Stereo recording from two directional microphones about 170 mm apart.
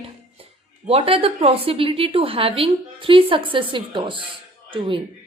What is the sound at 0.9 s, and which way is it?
A woman's voice, 35° right (ahead or behind).